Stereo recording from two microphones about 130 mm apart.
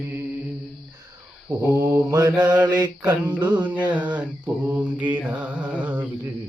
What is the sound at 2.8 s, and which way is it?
Speech, 30° right (ahead or behind).